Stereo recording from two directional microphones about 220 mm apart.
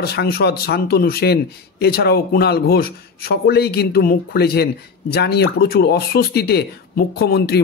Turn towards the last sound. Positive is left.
turn(degrees=45)  # may be behind; listen again after turning